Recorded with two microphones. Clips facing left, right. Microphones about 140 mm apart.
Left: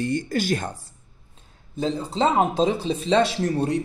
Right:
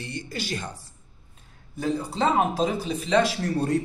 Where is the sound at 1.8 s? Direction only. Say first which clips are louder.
Left 2 dB; 20° left (ahead or behind).